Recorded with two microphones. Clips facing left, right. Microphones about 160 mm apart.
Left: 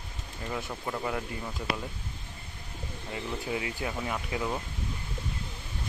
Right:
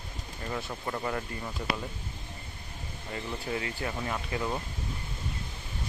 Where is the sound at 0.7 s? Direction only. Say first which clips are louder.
Even; centre (ahead or behind).